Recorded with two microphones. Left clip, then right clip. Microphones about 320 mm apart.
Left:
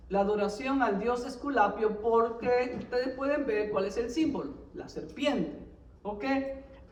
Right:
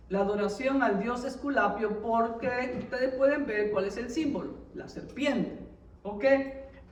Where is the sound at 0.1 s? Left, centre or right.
Centre.